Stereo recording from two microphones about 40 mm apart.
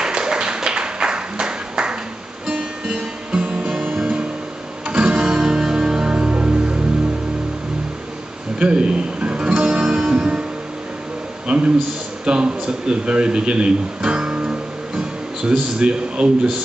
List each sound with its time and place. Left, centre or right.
0.0 s a sound: centre
2.4 s music: right
3.8 s music: right
4.8 s music: right
5.1 s music: centre
6.1 s music: right
8.5 s music: right
11.4 s a sound: right
12.3 s speech: right
15.8 s a man's voice: right